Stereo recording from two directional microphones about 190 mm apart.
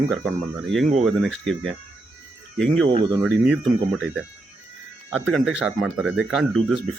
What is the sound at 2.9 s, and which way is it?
Speech, 25° right (ahead or behind).